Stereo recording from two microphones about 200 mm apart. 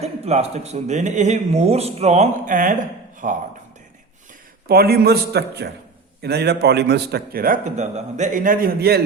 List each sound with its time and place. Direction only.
0.0 s speech: 35° right (ahead or behind)
4.7 s a man's voice: 50° right (ahead or behind)